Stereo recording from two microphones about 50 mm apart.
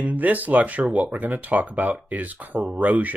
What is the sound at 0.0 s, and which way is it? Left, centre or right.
Speech, right.